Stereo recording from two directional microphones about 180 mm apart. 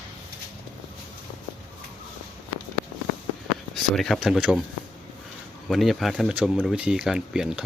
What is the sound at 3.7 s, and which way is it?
Speech, centre (ahead or behind).